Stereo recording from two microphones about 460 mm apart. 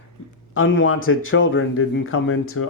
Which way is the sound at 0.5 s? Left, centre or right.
Left.